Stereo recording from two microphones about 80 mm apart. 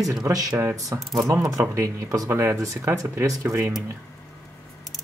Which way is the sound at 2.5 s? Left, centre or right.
Right.